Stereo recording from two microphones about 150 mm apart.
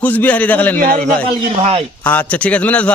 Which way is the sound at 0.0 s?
10° left (ahead or behind).